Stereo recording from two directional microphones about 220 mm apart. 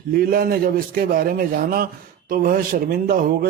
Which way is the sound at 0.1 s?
40° right (ahead or behind).